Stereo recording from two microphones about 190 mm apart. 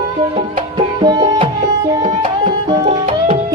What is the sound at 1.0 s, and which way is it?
Music, 20° right (ahead or behind).